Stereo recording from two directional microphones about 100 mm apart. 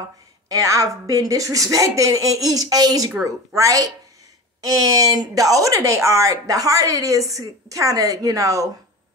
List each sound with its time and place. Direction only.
0.5 s speech: 35° right (ahead or behind)